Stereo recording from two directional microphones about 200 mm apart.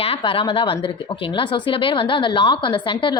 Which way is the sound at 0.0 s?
25° left (ahead or behind).